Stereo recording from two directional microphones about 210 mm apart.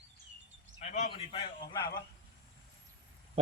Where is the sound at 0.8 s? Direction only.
35° left (ahead or behind).